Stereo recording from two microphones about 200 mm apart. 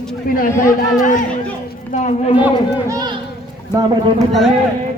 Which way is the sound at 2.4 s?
15° right (ahead or behind).